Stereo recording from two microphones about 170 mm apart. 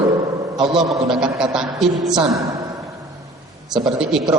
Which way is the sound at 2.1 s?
25° right (ahead or behind).